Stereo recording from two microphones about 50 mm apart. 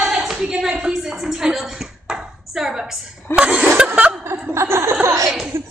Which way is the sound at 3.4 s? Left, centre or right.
Right.